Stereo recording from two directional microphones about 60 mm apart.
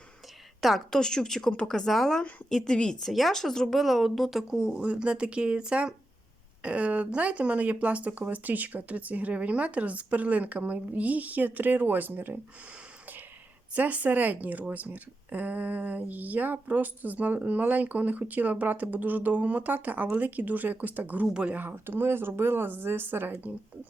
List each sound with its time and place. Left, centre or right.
0.6 s a woman's voice: centre
0.9 s a woman's voice: centre
3.1 s speech: centre; by 12.4 s right
13.7 s speech: right